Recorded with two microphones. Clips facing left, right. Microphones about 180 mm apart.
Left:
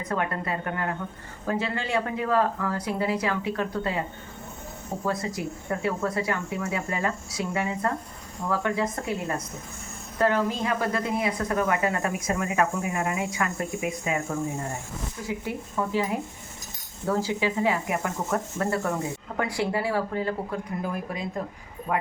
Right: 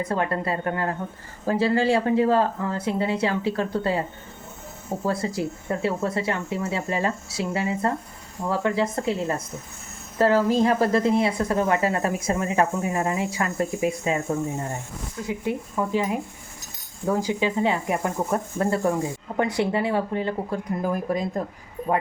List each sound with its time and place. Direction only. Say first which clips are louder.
0.0 s speech: right 4 dB; 30° right (ahead or behind)
5.0 s speech: right 3 dB; 30° right (ahead or behind)
15.4 s speech: right 5 dB; 15° right (ahead or behind)
17.1 s speech: right 2 dB; 15° right (ahead or behind)
21.1 s speech: right 8 dB; 40° right (ahead or behind)